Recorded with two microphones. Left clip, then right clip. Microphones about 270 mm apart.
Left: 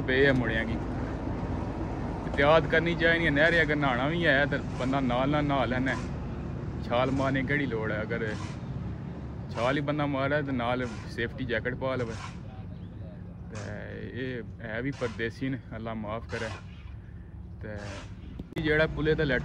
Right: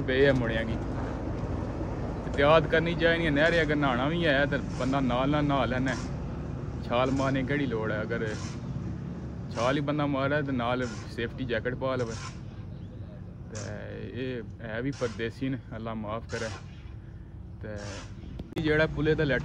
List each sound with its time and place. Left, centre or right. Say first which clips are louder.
0.0 s speech: even; centre
1.2 s vehicle: even; left
2.3 s speech: even; centre
9.6 s speech: even; centre
13.7 s speech: even; centre
18.5 s speech: even; centre